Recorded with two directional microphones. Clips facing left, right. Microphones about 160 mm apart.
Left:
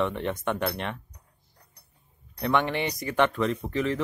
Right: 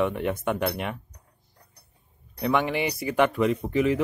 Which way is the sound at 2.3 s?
5° right (ahead or behind).